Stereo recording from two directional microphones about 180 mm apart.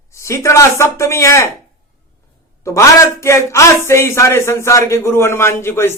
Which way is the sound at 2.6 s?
15° left (ahead or behind).